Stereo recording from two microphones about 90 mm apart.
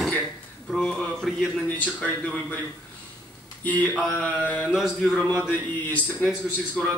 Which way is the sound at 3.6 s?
15° left (ahead or behind).